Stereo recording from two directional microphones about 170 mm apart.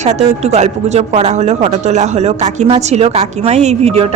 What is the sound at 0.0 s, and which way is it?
Speech, 40° right (ahead or behind).